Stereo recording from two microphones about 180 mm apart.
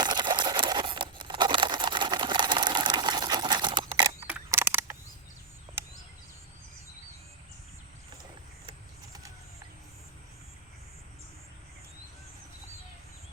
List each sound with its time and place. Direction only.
0.0 s crumpling: 25° right (ahead or behind)
4.3 s camera: 10° right (ahead or behind)